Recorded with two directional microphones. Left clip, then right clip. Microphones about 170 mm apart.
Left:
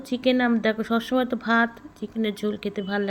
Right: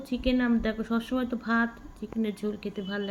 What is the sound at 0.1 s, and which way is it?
Speech, 20° left (ahead or behind).